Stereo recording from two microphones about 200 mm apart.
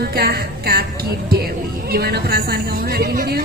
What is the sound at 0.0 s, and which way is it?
Speech, 50° right (ahead or behind).